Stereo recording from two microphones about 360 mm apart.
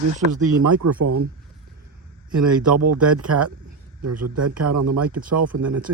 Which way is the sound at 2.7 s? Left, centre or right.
Right.